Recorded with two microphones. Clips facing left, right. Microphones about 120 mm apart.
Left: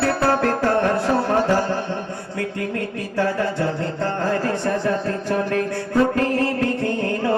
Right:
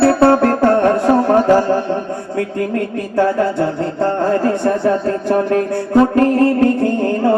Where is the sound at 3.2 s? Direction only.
30° right (ahead or behind).